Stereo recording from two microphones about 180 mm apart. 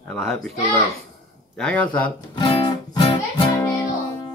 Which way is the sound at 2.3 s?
25° left (ahead or behind).